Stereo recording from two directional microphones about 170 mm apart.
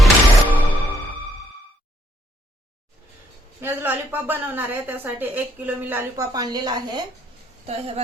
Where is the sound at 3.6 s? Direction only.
10° right (ahead or behind).